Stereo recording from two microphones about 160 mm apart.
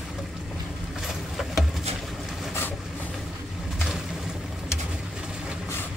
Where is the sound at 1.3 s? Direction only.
Centre (ahead or behind).